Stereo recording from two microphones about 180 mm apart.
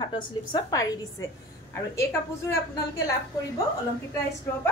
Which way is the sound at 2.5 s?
15° left (ahead or behind).